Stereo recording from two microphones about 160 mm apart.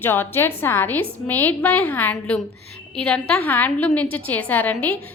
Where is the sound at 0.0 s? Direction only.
15° left (ahead or behind).